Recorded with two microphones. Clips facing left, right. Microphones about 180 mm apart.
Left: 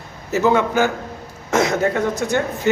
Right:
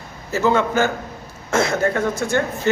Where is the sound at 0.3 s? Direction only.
20° left (ahead or behind).